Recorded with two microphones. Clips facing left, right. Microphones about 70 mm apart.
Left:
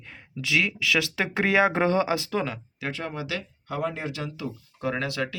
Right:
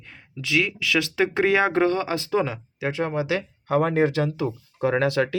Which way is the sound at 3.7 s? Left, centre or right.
Right.